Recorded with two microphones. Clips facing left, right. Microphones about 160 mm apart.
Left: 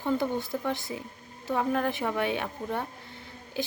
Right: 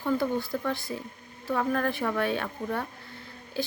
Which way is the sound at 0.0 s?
20° left (ahead or behind).